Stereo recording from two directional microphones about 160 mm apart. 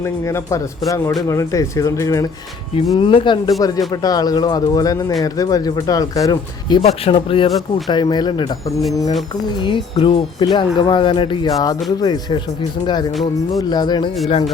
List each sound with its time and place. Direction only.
0.0 s speech: 15° left (ahead or behind)
2.9 s speech: 30° left (ahead or behind)
6.8 s speech: 35° left (ahead or behind)